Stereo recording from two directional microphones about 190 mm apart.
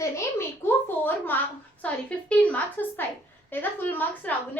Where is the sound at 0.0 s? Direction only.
15° left (ahead or behind).